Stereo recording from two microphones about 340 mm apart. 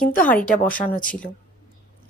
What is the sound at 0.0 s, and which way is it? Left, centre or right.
Speech, left.